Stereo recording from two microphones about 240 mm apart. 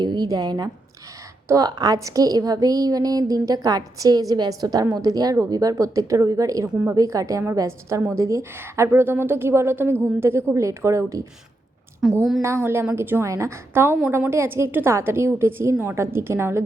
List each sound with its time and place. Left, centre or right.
0.0 s a woman's voice: centre
12.0 s a woman's voice: centre
12.4 s a woman's voice: centre